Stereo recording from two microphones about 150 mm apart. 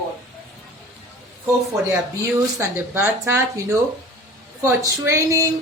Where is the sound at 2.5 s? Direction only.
15° right (ahead or behind).